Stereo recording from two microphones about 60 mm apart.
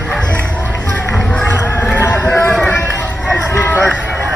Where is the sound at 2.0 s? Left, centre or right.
Left.